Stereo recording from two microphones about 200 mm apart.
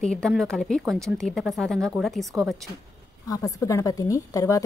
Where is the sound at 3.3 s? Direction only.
15° left (ahead or behind).